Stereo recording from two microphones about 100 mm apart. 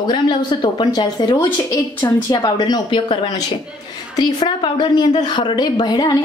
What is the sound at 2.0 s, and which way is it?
A woman's voice, 35° left (ahead or behind).